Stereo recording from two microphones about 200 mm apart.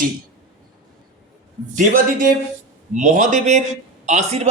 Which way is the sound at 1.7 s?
40° right (ahead or behind).